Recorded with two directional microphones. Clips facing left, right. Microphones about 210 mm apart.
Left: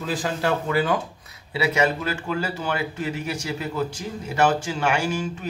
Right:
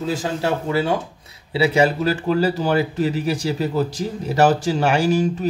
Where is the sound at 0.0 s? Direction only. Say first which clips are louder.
Right 3 dB; 25° right (ahead or behind).